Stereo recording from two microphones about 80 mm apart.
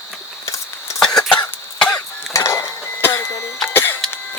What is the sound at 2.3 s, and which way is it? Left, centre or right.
Mechanisms, left.